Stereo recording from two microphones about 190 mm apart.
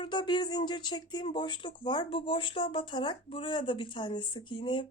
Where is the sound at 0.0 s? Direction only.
25° left (ahead or behind).